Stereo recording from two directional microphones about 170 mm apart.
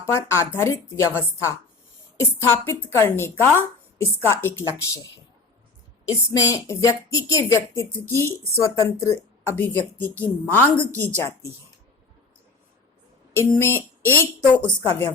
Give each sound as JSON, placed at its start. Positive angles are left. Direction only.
{"t": 0.0, "sound": "speech", "side_deg": 15}
{"t": 6.1, "sound": "speech", "side_deg": 20}
{"t": 13.5, "sound": "speech", "side_deg": 15}